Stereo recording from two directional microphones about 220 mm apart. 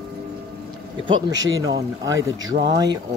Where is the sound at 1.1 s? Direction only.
15° right (ahead or behind).